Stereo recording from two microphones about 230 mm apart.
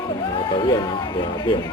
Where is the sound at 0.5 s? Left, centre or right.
Centre.